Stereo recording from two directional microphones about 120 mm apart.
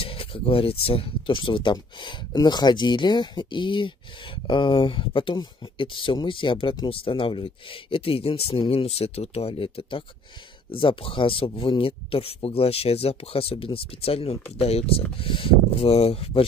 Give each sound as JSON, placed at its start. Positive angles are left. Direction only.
{"t": 0.0, "sound": "speech", "side_deg": 50}